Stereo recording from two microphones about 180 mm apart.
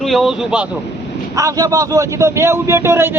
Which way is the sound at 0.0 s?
Centre (ahead or behind).